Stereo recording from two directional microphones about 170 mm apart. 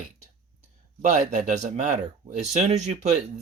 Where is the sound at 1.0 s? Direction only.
45° right (ahead or behind).